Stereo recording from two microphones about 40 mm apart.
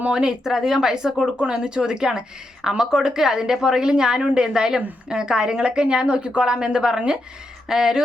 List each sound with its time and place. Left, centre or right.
0.1 s a woman's voice: centre